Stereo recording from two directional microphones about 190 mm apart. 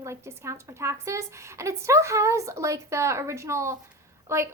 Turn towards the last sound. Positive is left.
turn(degrees=-15)  # may be behind; listen again after turning